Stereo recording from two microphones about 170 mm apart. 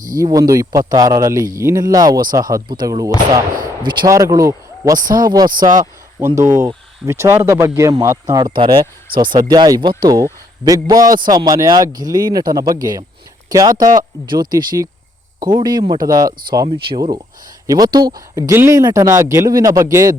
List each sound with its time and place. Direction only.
0.2 s speech: 20° right (ahead or behind)